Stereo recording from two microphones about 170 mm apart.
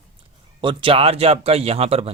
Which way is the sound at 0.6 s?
30° right (ahead or behind).